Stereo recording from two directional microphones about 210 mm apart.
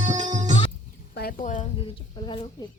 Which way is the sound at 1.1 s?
40° left (ahead or behind).